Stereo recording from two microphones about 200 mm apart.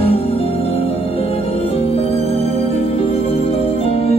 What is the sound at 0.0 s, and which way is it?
Music, 30° left (ahead or behind).